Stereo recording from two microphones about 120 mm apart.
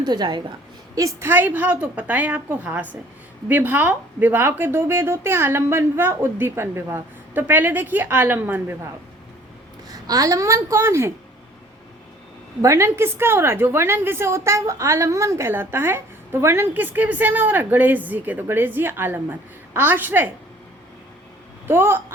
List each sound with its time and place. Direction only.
0.0 s a woman's voice: 35° right (ahead or behind)
1.3 s speech: 15° right (ahead or behind)
9.9 s a woman's voice: 30° right (ahead or behind)
12.6 s a woman's voice: 25° right (ahead or behind)
21.7 s a woman's voice: 20° right (ahead or behind)